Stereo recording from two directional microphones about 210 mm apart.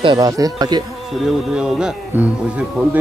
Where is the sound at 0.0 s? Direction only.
20° right (ahead or behind).